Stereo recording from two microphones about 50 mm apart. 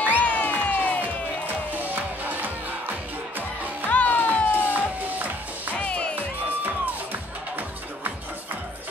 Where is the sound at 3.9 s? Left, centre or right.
Left.